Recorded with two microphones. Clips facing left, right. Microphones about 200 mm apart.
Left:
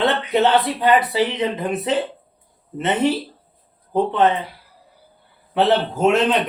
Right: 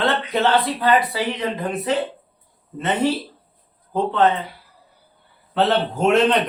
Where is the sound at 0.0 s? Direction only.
20° left (ahead or behind).